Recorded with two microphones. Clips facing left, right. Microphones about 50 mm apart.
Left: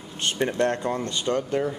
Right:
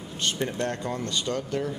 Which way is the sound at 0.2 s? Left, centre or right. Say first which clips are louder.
Left 5 dB; left.